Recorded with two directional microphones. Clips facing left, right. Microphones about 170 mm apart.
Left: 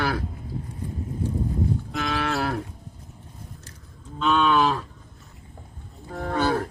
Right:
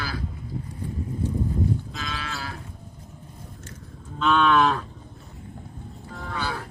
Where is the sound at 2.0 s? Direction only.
65° left (ahead or behind).